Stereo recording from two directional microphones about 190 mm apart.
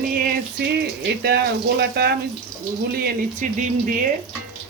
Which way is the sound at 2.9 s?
45° right (ahead or behind).